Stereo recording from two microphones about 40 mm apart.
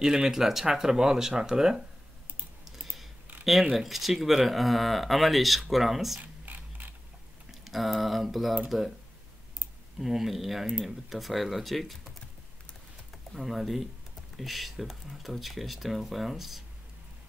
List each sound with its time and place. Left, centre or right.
0.0 s speech: centre
3.7 s speech: centre
6.4 s mechanisms: right
7.6 s speech: centre
9.9 s speech: centre
13.3 s speech: centre